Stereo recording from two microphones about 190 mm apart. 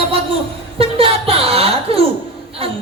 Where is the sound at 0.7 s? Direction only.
30° right (ahead or behind).